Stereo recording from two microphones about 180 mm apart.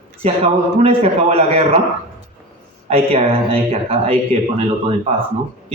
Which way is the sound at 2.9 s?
35° right (ahead or behind).